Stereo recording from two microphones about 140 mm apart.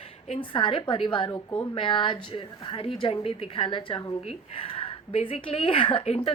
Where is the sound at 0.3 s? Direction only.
35° left (ahead or behind).